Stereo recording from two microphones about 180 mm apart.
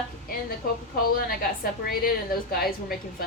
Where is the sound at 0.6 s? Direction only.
55° left (ahead or behind).